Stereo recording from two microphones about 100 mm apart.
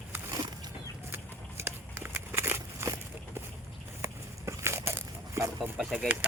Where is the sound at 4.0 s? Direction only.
25° right (ahead or behind).